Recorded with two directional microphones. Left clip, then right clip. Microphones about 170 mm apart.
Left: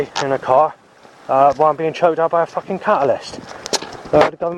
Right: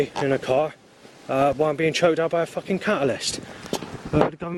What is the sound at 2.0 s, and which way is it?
Speech, 30° left (ahead or behind).